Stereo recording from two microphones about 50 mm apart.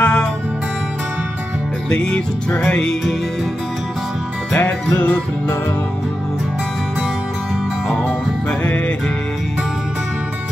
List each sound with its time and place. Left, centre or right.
0.0 s music: centre
1.9 s music: left
4.6 s music: left
7.9 s music: left